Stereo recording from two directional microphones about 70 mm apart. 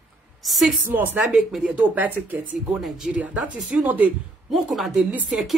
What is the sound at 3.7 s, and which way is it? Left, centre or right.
Speech, centre.